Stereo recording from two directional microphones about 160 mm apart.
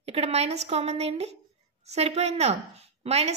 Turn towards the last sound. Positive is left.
turn(degrees=-40)  # may be behind; listen again after turning